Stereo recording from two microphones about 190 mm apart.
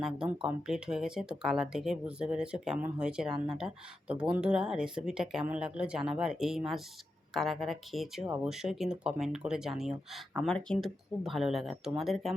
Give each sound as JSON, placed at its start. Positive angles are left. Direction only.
{"t": 0.0, "sound": "speech", "side_deg": -5}
{"t": 3.3, "sound": "speech", "side_deg": -25}
{"t": 4.1, "sound": "speech", "side_deg": -5}